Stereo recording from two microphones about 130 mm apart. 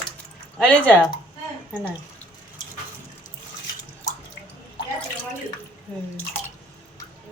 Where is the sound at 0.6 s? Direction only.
10° left (ahead or behind).